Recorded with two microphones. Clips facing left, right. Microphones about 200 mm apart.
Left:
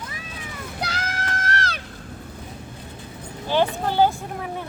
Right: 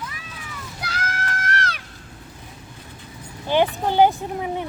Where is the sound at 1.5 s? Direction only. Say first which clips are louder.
Even; 30° left (ahead or behind).